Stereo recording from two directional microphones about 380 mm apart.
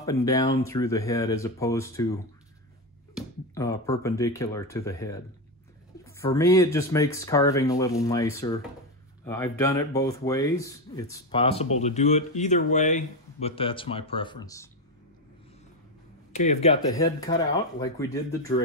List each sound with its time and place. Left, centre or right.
0.0 s speech: centre
3.5 s speech: centre
16.3 s speech: centre